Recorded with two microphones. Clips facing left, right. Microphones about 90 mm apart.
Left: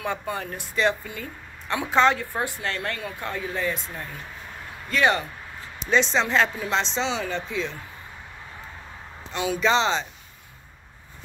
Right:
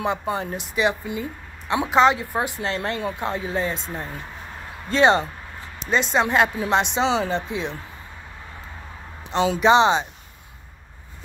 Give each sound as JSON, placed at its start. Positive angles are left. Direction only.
{"t": 0.0, "sound": "speech", "side_deg": -25}
{"t": 5.9, "sound": "speech", "side_deg": -5}
{"t": 9.3, "sound": "speech", "side_deg": -25}